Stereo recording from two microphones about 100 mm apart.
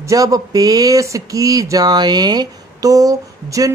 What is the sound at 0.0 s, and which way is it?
Speech, 35° right (ahead or behind).